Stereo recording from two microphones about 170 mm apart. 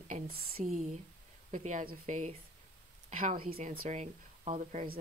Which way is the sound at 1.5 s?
50° right (ahead or behind).